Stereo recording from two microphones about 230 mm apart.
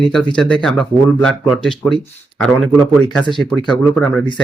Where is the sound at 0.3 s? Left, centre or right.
Centre.